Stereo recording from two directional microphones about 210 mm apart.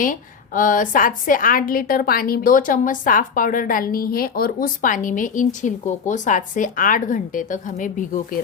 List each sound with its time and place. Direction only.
0.0 s a woman's voice: 40° left (ahead or behind)